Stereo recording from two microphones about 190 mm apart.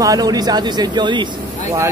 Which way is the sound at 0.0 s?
20° right (ahead or behind).